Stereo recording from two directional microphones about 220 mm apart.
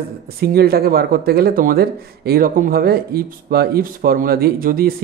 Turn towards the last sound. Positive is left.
turn(degrees=-40)  # may be behind; listen again after turning